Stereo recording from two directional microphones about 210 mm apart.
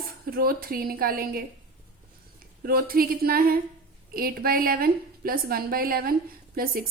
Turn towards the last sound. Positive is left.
turn(degrees=-45)  # may be behind; listen again after turning